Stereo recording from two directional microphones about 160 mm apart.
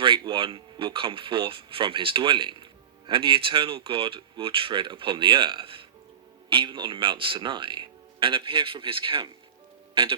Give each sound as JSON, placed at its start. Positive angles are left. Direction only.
{"t": 0.0, "sound": "speech", "side_deg": -30}